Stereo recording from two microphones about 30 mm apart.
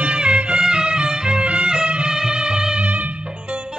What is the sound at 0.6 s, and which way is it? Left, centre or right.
Music, right.